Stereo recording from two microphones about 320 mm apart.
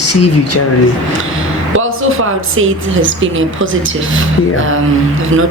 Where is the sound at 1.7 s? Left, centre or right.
Right.